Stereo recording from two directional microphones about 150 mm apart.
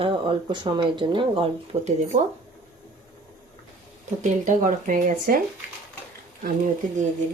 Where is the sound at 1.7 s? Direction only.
45° right (ahead or behind).